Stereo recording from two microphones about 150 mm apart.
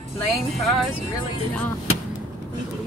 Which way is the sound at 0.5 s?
Centre (ahead or behind).